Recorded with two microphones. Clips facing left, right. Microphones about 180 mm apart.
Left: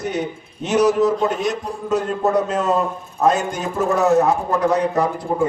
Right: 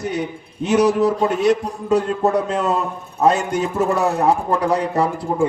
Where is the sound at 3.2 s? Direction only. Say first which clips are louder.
Right 1 dB; 30° right (ahead or behind).